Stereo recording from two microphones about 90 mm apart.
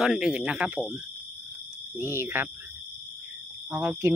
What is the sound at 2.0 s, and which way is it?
Speech, 25° right (ahead or behind).